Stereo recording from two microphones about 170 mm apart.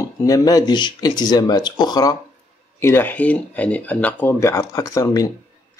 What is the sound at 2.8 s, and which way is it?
Speech, 15° left (ahead or behind).